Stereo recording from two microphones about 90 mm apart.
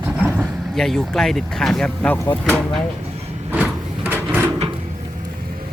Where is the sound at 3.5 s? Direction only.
20° right (ahead or behind).